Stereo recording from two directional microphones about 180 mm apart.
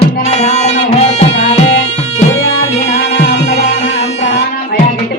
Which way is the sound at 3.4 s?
35° left (ahead or behind).